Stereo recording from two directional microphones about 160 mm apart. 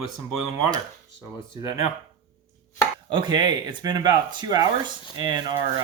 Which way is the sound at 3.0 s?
30° right (ahead or behind).